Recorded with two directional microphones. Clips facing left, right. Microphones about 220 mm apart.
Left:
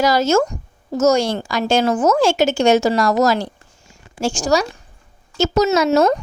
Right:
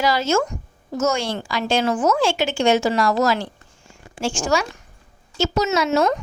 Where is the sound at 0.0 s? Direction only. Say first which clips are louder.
Left 4 dB; 40° left (ahead or behind).